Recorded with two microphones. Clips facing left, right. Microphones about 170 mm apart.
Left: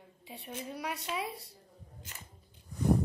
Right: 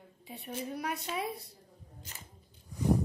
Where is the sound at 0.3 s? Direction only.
45° right (ahead or behind).